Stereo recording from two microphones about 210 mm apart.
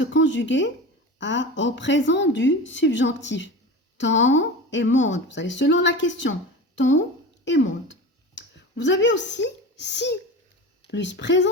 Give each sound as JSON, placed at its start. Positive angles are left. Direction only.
{"t": 0.0, "sound": "speech", "side_deg": 60}
{"t": 8.4, "sound": "a sound", "side_deg": 60}
{"t": 9.3, "sound": "a child's voice", "side_deg": 55}